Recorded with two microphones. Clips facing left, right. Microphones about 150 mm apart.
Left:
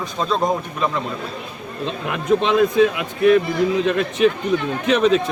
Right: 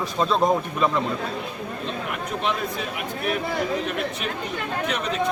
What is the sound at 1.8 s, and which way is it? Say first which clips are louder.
Speech: left 9 dB; 90° left.